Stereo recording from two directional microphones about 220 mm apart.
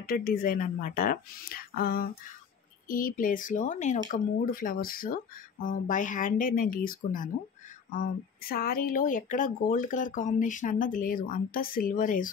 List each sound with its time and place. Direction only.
0.0 s speech: 40° left (ahead or behind)